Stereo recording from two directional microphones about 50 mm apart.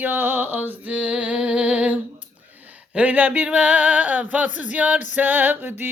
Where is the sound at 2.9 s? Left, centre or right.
Right.